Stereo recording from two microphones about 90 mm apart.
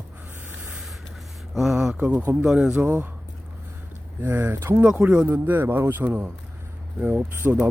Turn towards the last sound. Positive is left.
turn(degrees=-20)  # may be behind; listen again after turning